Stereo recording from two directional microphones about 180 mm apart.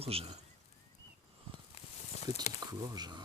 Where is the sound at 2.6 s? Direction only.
20° right (ahead or behind).